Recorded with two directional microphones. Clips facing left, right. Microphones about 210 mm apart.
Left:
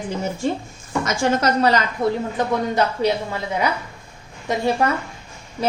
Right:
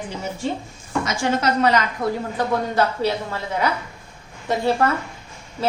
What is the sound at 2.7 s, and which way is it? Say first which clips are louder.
Speech: left 1 dB; 15° left (ahead or behind).